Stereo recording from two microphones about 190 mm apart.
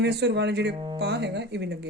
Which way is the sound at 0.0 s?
65° right (ahead or behind).